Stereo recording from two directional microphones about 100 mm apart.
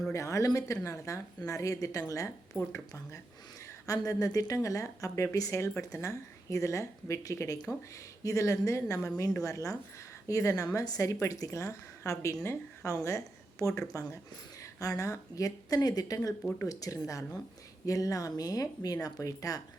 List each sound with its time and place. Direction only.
0.1 s a woman's voice: 30° left (ahead or behind)
13.1 s a sound: 30° left (ahead or behind)
13.9 s a woman's voice: 30° left (ahead or behind)